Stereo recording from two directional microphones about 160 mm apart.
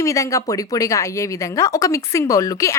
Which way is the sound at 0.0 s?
20° left (ahead or behind).